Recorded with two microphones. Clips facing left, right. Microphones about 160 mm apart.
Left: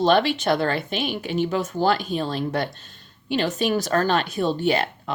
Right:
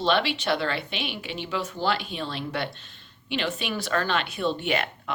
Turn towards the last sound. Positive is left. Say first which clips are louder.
# left 5 dB
turn(degrees=35)  # may be behind; listen again after turning